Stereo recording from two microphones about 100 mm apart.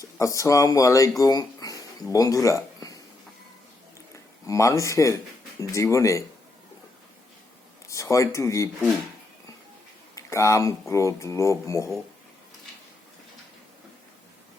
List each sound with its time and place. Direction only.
0.0 s speech: 30° left (ahead or behind)
1.2 s a sound: 35° left (ahead or behind)
4.1 s speech: 30° left (ahead or behind)
7.9 s speech: 30° left (ahead or behind)
10.2 s speech: 30° left (ahead or behind)